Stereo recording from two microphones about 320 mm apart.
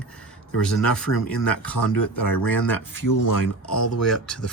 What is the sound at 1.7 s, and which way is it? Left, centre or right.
Speech, left.